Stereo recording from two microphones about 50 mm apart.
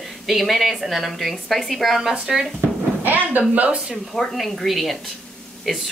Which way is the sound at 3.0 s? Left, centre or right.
Right.